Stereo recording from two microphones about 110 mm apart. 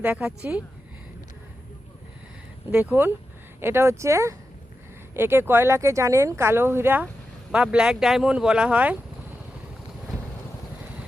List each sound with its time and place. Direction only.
0.0 s speech: 15° right (ahead or behind)
2.7 s speech: 20° right (ahead or behind)